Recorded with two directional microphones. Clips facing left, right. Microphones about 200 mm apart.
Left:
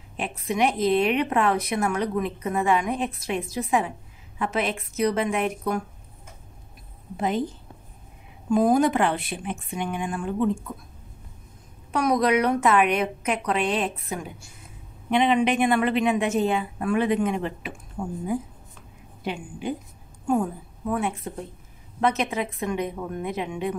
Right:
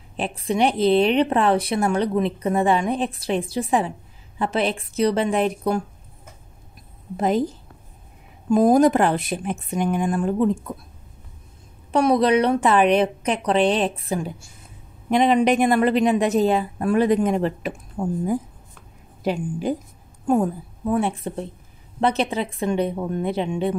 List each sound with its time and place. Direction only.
0.2 s a woman's voice: 30° right (ahead or behind)
7.2 s a woman's voice: 40° right (ahead or behind)
11.9 s a woman's voice: 30° right (ahead or behind)
19.2 s a woman's voice: 40° right (ahead or behind)
20.9 s a woman's voice: 30° right (ahead or behind)